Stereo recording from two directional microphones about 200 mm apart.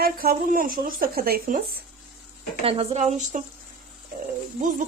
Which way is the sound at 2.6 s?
30° right (ahead or behind).